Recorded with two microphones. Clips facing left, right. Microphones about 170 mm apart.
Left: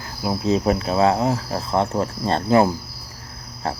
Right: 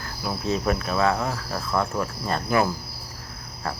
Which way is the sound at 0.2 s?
20° left (ahead or behind).